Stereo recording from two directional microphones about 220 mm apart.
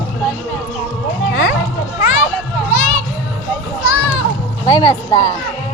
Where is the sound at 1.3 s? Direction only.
45° left (ahead or behind).